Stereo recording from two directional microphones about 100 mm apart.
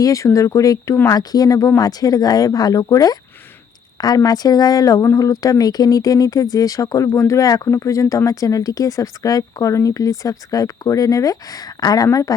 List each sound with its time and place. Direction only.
0.0 s speech: 30° left (ahead or behind)